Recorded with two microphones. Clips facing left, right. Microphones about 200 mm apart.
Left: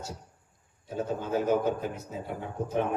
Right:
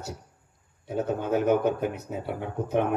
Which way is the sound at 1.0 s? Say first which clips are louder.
Right 4 dB; 65° right (ahead or behind).